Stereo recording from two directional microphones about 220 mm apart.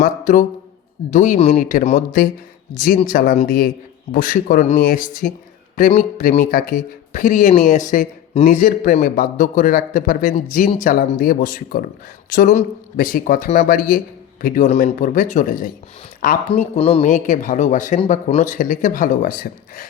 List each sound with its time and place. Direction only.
0.0 s speech: 35° left (ahead or behind)
16.7 s speech: 25° left (ahead or behind)